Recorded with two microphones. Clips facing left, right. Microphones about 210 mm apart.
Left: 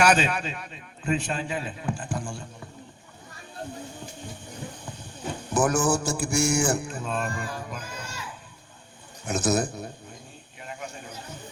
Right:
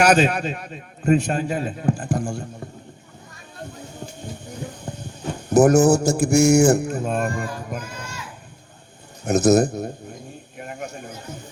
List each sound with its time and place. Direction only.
0.0 s a man's voice: 40° right (ahead or behind)
5.5 s a man's voice: 40° right (ahead or behind)
9.2 s a man's voice: 40° right (ahead or behind)
10.6 s a sound: 45° right (ahead or behind)